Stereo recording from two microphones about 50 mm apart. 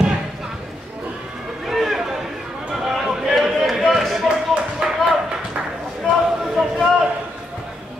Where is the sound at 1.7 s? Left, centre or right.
Centre.